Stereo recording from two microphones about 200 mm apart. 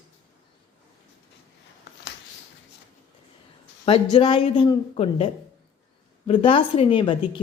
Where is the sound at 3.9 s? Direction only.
25° left (ahead or behind).